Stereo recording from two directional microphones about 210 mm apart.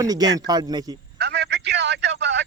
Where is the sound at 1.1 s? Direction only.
50° right (ahead or behind).